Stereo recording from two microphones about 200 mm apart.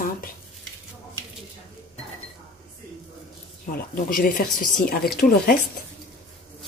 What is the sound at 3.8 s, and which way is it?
Speech, 45° left (ahead or behind).